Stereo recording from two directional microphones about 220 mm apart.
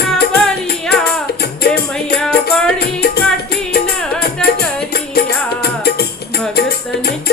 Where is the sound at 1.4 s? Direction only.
45° left (ahead or behind).